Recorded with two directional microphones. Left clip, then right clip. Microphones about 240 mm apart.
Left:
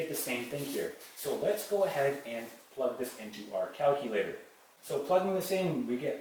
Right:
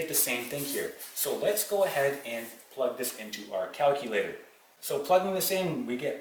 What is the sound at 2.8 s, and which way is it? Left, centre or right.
Speech, centre.